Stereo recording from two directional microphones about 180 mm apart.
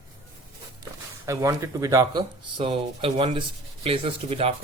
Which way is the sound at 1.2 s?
15° right (ahead or behind).